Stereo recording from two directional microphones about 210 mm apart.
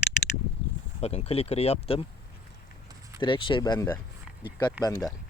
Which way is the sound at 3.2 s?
25° left (ahead or behind).